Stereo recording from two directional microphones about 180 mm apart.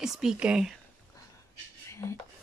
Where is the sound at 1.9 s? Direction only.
15° left (ahead or behind).